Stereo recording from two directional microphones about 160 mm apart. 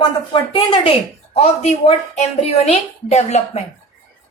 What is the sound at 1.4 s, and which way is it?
A woman's voice, 40° left (ahead or behind).